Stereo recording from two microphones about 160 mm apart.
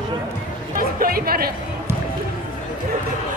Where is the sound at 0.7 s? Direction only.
65° right (ahead or behind).